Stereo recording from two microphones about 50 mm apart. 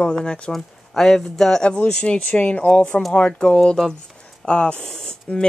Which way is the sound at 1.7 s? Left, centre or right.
Left.